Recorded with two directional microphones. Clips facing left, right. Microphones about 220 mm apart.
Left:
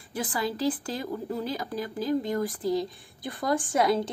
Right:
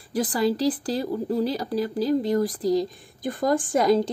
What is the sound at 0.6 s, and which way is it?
Speech, 35° right (ahead or behind).